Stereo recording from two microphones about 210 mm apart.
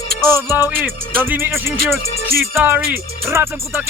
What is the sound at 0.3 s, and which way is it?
Music, 10° right (ahead or behind).